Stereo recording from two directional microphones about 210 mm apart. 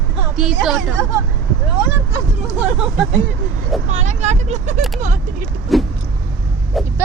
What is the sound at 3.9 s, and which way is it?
Speech, 35° right (ahead or behind).